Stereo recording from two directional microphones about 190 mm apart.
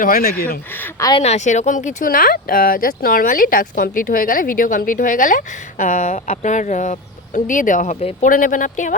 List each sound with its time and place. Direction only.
0.0 s speech: 50° left (ahead or behind)
0.9 s speech: 20° left (ahead or behind)
1.2 s speech: 35° left (ahead or behind)